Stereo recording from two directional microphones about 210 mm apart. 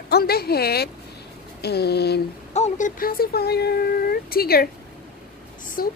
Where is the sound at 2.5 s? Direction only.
35° left (ahead or behind).